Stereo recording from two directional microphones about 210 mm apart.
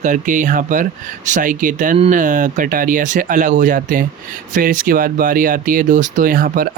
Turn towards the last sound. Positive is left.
turn(degrees=-40)  # may be behind; listen again after turning